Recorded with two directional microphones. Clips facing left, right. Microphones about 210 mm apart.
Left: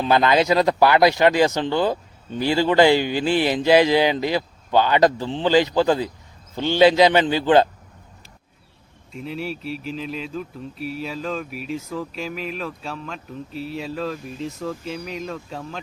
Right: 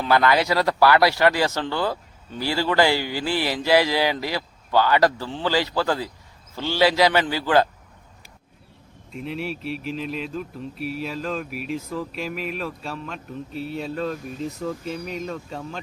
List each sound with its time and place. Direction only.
0.0 s speech: 20° left (ahead or behind)
9.1 s speech: centre (ahead or behind)